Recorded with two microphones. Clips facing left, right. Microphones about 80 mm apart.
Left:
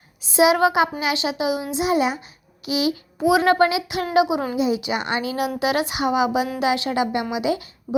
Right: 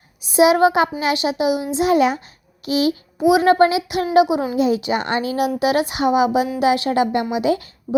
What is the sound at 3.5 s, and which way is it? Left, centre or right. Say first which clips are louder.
Speech: right 3 dB; right.